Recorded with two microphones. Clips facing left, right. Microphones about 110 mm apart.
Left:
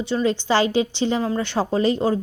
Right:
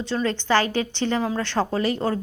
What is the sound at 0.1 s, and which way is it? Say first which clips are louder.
A woman's voice: left 2 dB; 15° left (ahead or behind).